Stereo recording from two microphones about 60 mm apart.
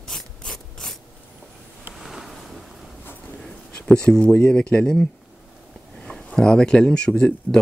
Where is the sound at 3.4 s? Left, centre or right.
Centre.